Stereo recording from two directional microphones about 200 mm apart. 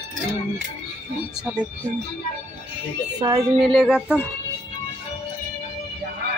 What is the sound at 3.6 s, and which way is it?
Speech, centre (ahead or behind).